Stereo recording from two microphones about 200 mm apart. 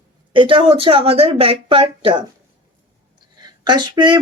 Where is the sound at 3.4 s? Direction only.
20° right (ahead or behind).